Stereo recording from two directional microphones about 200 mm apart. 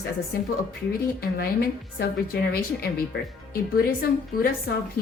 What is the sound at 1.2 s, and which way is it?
A woman's voice, 50° left (ahead or behind).